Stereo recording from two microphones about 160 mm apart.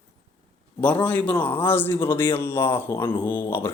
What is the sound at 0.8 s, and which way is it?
A man's voice, 10° left (ahead or behind).